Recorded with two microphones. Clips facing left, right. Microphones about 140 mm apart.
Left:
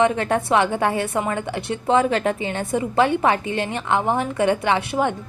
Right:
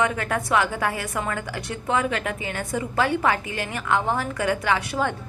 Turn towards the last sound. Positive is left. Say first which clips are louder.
# left 3 dB
turn(degrees=20)  # may be behind; listen again after turning